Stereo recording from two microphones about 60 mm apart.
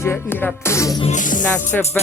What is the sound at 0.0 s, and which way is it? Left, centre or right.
Music, left.